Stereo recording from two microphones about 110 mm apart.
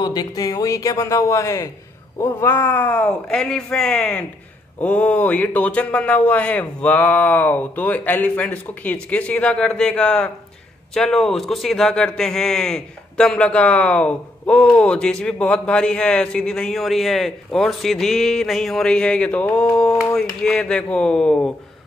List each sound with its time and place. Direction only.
0.0 s a man's voice: 40° left (ahead or behind); by 21.5 s 10° left (ahead or behind)